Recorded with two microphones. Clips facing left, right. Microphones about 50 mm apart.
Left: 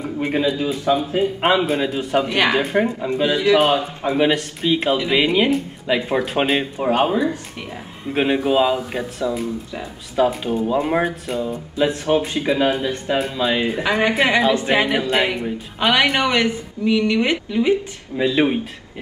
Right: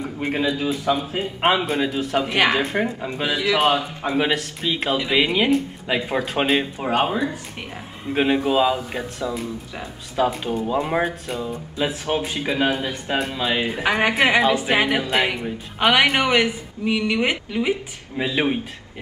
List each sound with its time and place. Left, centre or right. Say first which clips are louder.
0.2 s speech: left 3 dB; centre
2.2 s speech: left 1 dB; centre
2.5 s speech: left 3 dB; centre
13.8 s speech: even; centre